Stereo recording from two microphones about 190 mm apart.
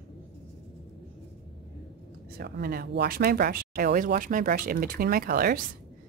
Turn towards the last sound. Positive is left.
turn(degrees=-50)  # may be behind; listen again after turning